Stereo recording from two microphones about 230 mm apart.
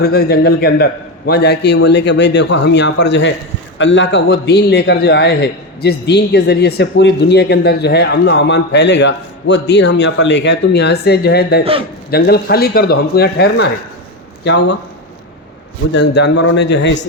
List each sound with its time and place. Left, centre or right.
0.0 s a man's voice: left
15.9 s a man's voice: left